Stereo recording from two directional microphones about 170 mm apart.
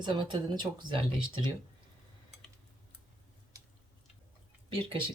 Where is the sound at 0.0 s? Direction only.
25° right (ahead or behind).